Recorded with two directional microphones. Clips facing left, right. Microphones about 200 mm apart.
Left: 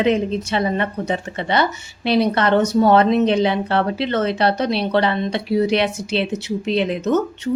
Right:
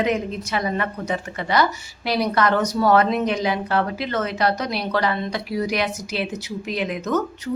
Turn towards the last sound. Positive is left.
turn(degrees=25)  # may be behind; listen again after turning